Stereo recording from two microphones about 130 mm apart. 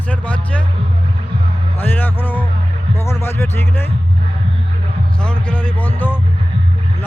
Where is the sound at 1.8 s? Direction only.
15° left (ahead or behind).